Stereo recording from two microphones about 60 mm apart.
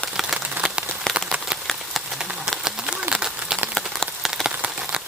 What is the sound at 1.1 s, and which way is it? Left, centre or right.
Rain on surface, centre.